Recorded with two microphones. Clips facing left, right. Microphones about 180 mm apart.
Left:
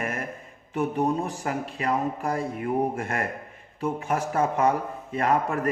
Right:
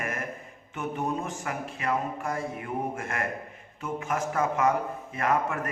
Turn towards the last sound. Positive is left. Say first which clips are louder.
# left 3 dB
turn(degrees=35)  # may be behind; listen again after turning